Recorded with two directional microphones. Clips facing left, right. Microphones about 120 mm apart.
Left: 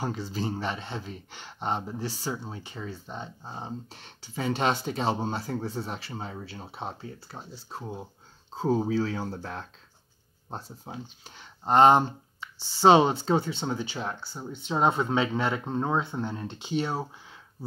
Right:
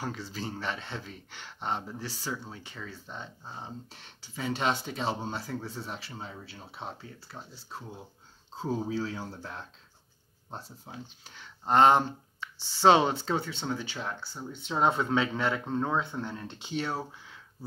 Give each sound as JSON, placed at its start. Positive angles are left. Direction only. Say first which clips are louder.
{"t": 0.0, "sound": "speech", "louder": "left 5 dB", "side_deg": 20}
{"t": 4.0, "sound": "speech", "louder": "left 4 dB", "side_deg": 50}
{"t": 6.6, "sound": "speech", "louder": "left 3 dB", "side_deg": 30}
{"t": 8.5, "sound": "speech", "louder": "left 6 dB", "side_deg": 55}
{"t": 10.9, "sound": "speech", "louder": "left 6 dB", "side_deg": 20}